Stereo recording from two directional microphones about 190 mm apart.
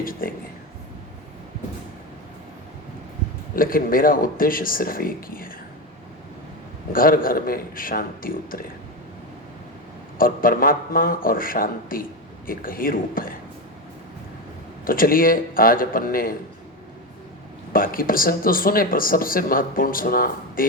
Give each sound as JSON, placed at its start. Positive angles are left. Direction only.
{"t": 0.0, "sound": "speech", "side_deg": 50}
{"t": 3.5, "sound": "speech", "side_deg": 50}
{"t": 6.9, "sound": "speech", "side_deg": 50}
{"t": 10.2, "sound": "speech", "side_deg": 50}
{"t": 14.8, "sound": "speech", "side_deg": 50}
{"t": 17.7, "sound": "speech", "side_deg": 50}